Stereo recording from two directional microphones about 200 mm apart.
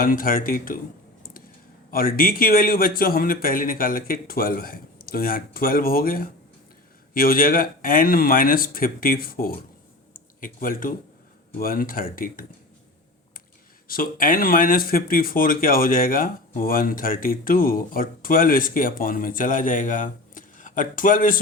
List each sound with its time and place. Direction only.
0.0 s speech: 45° left (ahead or behind)
1.9 s speech: 45° left (ahead or behind)
13.8 s speech: 45° left (ahead or behind)